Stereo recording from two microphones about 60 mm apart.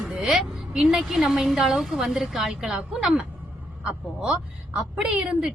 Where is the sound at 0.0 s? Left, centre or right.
Centre.